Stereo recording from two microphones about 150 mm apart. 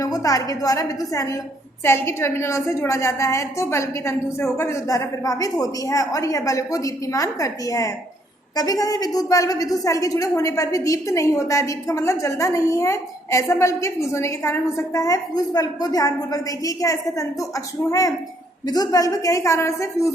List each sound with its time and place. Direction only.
0.0 s a woman's voice: 25° left (ahead or behind)